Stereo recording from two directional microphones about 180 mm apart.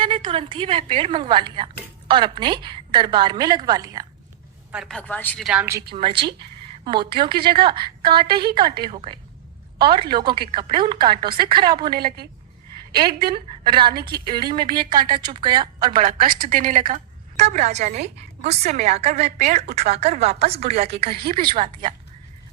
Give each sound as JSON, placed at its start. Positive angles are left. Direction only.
{"t": 0.0, "sound": "a woman's voice", "side_deg": -30}
{"t": 4.7, "sound": "a woman's voice", "side_deg": 0}
{"t": 5.5, "sound": "a woman's voice", "side_deg": -5}
{"t": 5.9, "sound": "a woman's voice", "side_deg": -30}
{"t": 13.1, "sound": "a woman's voice", "side_deg": -30}
{"t": 15.9, "sound": "a woman's voice", "side_deg": -50}